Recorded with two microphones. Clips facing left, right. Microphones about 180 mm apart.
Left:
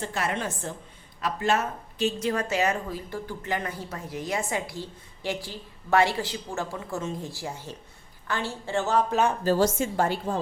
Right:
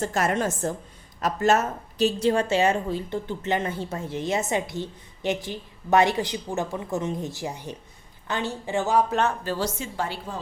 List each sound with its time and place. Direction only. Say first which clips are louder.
0.0 s a woman's voice: right 5 dB; 45° right (ahead or behind); by 9.0 s 15° right (ahead or behind)
9.4 s a woman's voice: left 6 dB; 45° left (ahead or behind)